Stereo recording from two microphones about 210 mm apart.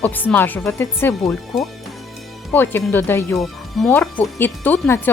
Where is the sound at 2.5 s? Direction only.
10° left (ahead or behind).